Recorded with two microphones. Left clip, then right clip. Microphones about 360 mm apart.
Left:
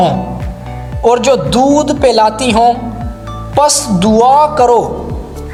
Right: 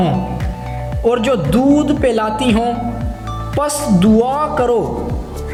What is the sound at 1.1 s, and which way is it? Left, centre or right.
A man's voice, centre.